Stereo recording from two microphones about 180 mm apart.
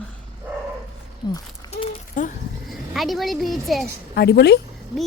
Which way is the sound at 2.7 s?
Centre (ahead or behind).